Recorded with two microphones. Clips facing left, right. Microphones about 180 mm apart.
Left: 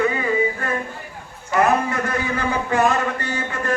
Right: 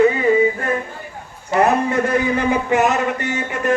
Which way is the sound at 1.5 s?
25° right (ahead or behind).